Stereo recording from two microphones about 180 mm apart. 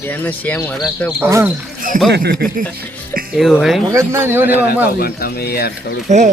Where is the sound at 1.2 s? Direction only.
15° right (ahead or behind).